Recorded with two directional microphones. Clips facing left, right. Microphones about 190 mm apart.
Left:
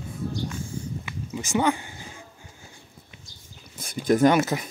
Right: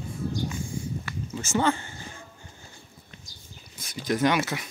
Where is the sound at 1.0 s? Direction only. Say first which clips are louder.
Left 1 dB; 15° left (ahead or behind).